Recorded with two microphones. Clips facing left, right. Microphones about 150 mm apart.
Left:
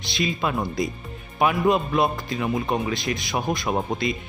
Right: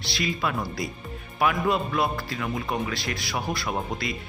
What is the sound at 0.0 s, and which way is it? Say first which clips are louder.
A man's voice: left 3 dB; 20° left (ahead or behind).